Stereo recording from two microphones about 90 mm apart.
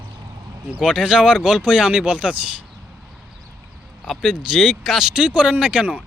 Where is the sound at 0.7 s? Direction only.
10° right (ahead or behind).